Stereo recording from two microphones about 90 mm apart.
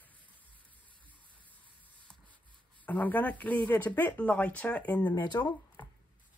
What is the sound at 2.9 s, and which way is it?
Speech, 20° left (ahead or behind).